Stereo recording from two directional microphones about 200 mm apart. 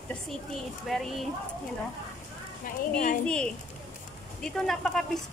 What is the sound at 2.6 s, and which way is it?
Speech, 40° left (ahead or behind).